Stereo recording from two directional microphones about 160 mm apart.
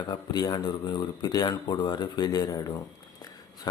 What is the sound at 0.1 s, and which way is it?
Speech, 25° left (ahead or behind).